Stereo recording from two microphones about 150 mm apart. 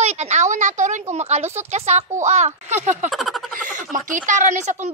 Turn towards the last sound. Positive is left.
turn(degrees=-55)  # may be behind; listen again after turning